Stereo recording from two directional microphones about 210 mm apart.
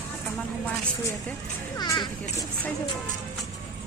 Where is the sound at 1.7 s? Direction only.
20° left (ahead or behind).